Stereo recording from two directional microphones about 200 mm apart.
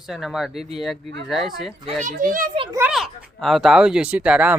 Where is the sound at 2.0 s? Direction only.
40° right (ahead or behind).